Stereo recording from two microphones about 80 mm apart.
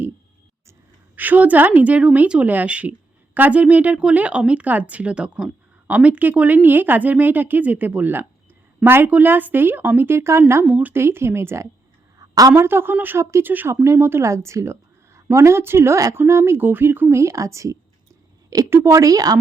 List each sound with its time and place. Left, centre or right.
1.1 s speech: right
10.7 s speech: right
11.0 s a woman's voice: right
12.2 s a sound: right
12.5 s speech: right
13.7 s a woman's voice: right
17.2 s a woman's voice: right